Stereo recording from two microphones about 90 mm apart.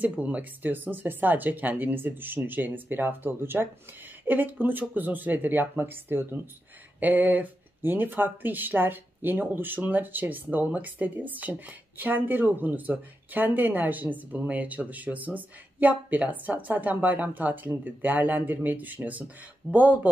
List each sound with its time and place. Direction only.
0.0 s speech: 15° right (ahead or behind)